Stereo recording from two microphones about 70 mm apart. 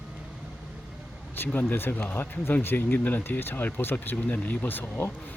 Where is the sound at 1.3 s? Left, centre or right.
Left.